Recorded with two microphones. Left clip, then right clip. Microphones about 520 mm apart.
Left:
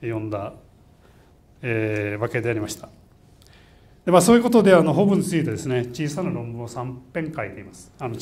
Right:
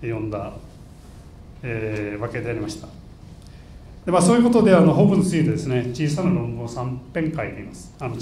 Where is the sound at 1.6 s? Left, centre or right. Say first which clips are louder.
Left 3 dB; left.